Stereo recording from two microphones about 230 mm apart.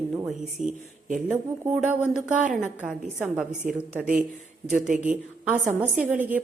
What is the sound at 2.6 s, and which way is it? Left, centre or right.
Speech, centre.